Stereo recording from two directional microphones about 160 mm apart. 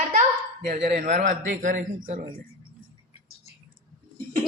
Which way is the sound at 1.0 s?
50° right (ahead or behind).